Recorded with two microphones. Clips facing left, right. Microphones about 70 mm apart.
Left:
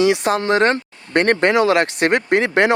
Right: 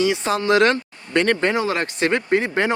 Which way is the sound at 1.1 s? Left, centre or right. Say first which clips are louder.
Left 4 dB; left.